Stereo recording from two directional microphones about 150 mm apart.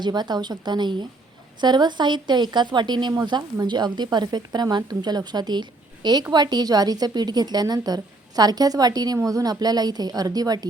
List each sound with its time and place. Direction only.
0.0 s speech: 30° right (ahead or behind)